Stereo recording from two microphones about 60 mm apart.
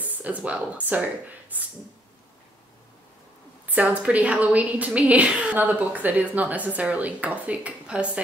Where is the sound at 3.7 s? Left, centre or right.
Right.